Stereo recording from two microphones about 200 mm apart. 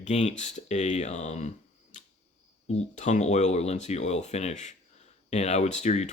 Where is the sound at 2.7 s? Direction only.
35° left (ahead or behind).